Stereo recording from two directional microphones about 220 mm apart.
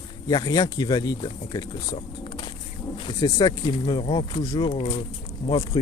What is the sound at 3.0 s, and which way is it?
Speech, 20° left (ahead or behind).